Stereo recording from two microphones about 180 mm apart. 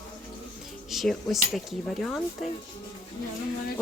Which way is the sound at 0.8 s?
Centre (ahead or behind).